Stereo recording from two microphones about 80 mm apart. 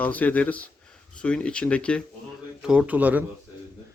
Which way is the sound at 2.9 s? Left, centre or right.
Centre.